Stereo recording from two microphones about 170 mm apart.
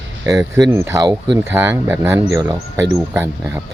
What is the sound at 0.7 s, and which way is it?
Speech, 15° right (ahead or behind).